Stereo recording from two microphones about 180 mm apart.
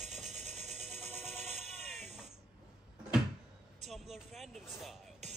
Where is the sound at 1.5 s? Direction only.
40° right (ahead or behind).